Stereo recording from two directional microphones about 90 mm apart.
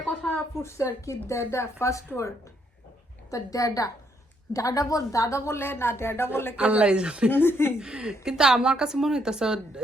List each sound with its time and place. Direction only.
0.0 s a sound: 15° left (ahead or behind)
0.3 s speech: 30° left (ahead or behind)
3.2 s a woman's voice: 35° left (ahead or behind)
6.6 s a woman's voice: 15° right (ahead or behind)
7.3 s a woman's voice: 25° left (ahead or behind)
7.8 s a woman's voice: 10° right (ahead or behind)